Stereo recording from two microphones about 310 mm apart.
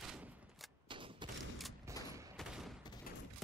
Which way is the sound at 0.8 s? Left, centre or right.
Centre.